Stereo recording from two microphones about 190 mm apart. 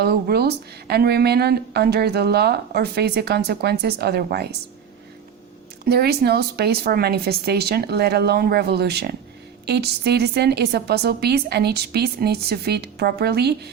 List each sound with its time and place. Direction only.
0.0 s speech: 55° right (ahead or behind)
5.8 s speech: 55° right (ahead or behind)